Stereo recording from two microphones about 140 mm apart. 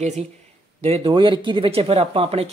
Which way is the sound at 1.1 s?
35° right (ahead or behind).